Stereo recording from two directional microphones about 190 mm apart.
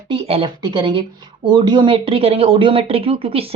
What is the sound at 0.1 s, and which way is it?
A woman's voice, 30° right (ahead or behind).